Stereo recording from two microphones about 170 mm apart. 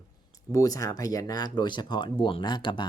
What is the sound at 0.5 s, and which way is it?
Speech, 20° left (ahead or behind).